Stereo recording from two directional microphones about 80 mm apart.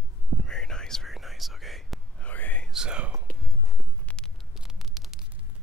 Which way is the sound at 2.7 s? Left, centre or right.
Centre.